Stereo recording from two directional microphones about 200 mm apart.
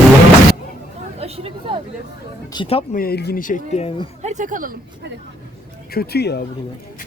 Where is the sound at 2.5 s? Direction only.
25° left (ahead or behind).